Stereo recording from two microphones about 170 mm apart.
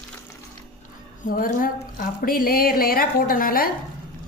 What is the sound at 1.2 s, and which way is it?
A woman's voice, 50° left (ahead or behind).